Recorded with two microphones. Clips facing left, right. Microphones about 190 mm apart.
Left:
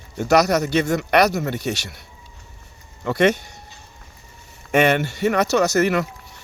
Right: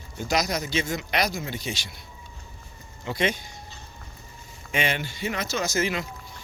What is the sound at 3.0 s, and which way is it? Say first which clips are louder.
Speech: left 9 dB; 65° left (ahead or behind).